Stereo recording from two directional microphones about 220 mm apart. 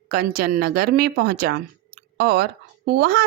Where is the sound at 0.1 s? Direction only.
40° right (ahead or behind).